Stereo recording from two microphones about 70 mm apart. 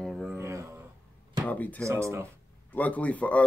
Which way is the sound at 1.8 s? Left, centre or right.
Right.